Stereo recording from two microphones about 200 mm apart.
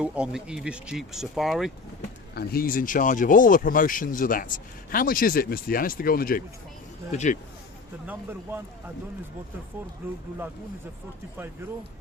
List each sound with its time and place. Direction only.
0.0 s speech: 5° right (ahead or behind)
2.3 s speech: 50° left (ahead or behind)
7.1 s speech: 35° left (ahead or behind)
8.0 s speech: 10° right (ahead or behind)